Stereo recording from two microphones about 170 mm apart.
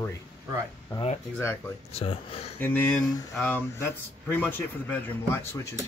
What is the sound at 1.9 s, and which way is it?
Speech, 35° left (ahead or behind).